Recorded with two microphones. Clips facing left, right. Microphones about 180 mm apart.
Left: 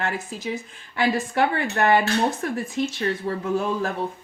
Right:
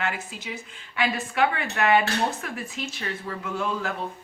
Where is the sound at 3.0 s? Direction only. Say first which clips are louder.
Left 7 dB; 40° left (ahead or behind).